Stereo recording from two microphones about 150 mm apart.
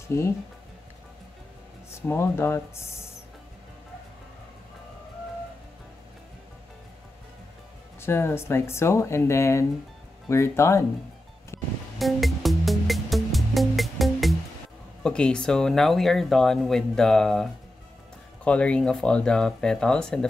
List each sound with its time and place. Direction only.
0.1 s speech: 20° left (ahead or behind)
1.9 s speech: 15° left (ahead or behind)
8.0 s speech: 15° left (ahead or behind)
11.5 s music: 15° left (ahead or behind)
12.0 s music: centre (ahead or behind)
15.0 s speech: 5° left (ahead or behind)